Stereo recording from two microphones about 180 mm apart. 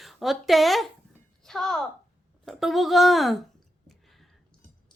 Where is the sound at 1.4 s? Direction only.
5° left (ahead or behind).